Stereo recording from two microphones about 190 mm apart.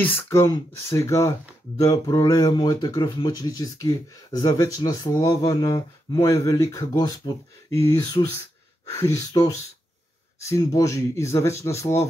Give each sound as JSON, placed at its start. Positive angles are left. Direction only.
{"t": 0.0, "sound": "speech", "side_deg": 10}